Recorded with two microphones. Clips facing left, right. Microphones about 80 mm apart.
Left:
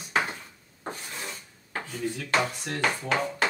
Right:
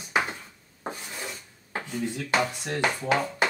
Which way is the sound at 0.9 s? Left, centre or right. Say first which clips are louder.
Right 1 dB; centre.